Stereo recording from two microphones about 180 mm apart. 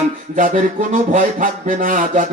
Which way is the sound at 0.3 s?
45° right (ahead or behind).